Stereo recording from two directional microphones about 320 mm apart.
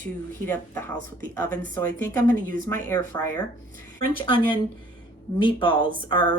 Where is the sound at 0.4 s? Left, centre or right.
Centre.